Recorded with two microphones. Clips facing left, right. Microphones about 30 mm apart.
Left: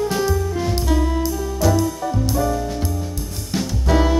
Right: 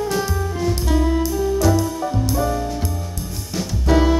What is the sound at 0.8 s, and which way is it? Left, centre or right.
Saxophone, centre.